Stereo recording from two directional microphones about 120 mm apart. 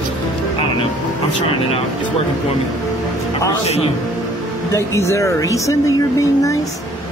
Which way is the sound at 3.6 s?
60° left (ahead or behind).